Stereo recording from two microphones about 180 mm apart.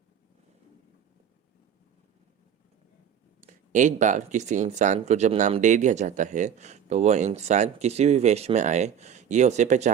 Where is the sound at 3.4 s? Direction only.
45° right (ahead or behind).